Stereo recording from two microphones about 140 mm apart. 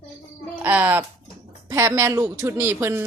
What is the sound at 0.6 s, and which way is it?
Speech, 15° right (ahead or behind).